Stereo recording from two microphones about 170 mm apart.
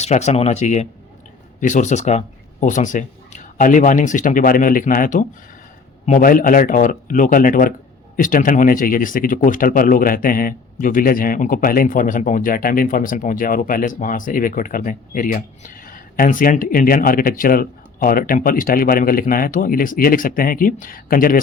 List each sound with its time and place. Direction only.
0.0 s speech: 40° left (ahead or behind)